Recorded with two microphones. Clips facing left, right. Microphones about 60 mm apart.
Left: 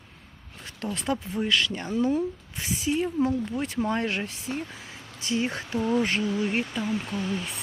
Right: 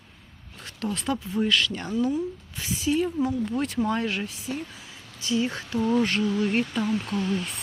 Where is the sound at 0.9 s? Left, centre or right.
Left.